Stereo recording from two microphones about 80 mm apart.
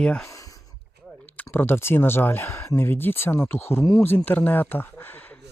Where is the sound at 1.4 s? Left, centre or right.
Left.